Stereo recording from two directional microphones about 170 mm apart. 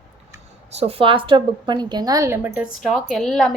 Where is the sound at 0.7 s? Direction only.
35° right (ahead or behind); by 2.5 s 15° right (ahead or behind).